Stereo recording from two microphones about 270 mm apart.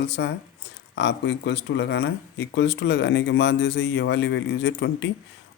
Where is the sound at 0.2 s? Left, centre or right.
Left.